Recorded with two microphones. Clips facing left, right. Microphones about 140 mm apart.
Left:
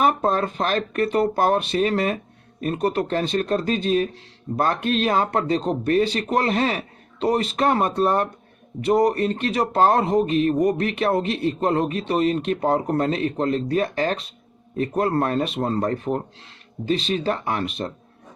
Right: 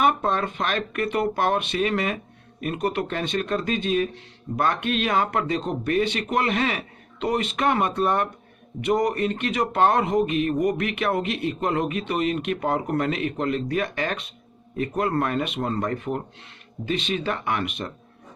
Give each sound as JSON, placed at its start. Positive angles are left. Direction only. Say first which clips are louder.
{"t": 0.0, "sound": "speech", "louder": "left 2 dB", "side_deg": 35}